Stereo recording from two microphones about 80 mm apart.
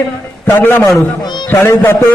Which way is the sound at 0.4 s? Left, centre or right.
Left.